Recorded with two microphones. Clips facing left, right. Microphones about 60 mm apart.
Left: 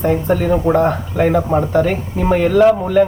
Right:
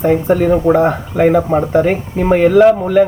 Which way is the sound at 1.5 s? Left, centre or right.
Right.